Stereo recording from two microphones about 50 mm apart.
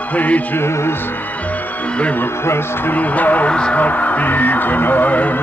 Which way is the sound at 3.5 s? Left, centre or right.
Centre.